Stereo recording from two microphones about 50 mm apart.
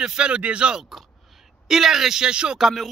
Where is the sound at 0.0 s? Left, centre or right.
Centre.